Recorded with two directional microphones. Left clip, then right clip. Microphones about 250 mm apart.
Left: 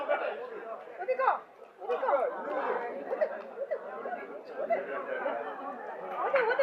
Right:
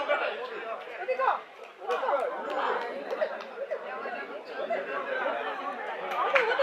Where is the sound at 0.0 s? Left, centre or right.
Centre.